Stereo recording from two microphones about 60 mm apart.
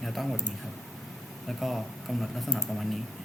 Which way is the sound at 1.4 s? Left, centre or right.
Centre.